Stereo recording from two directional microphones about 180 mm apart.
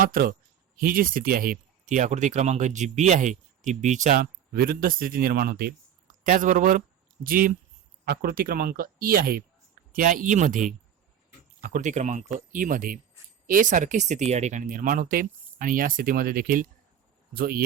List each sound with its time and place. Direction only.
0.0 s speech: 55° right (ahead or behind)